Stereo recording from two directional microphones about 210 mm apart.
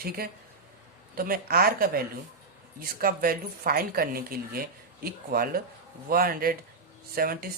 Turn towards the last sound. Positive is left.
turn(degrees=-45)  # may be behind; listen again after turning